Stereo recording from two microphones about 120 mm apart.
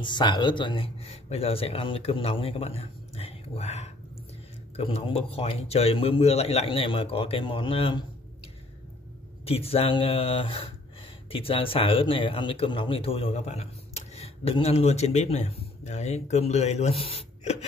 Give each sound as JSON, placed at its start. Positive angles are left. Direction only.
{"t": 0.0, "sound": "speech", "side_deg": 40}
{"t": 1.0, "sound": "speech", "side_deg": 60}
{"t": 4.7, "sound": "a man's voice", "side_deg": 50}
{"t": 9.4, "sound": "a man's voice", "side_deg": 55}